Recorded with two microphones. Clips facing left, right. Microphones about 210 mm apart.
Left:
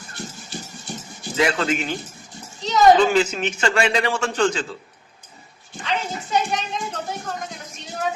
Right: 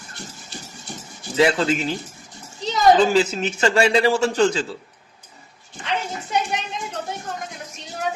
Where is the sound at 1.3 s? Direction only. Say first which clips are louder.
Right 3 dB; 30° right (ahead or behind).